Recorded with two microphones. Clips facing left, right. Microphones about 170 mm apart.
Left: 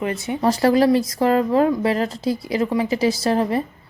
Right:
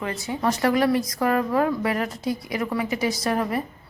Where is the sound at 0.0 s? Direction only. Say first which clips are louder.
Left 5 dB; 20° left (ahead or behind).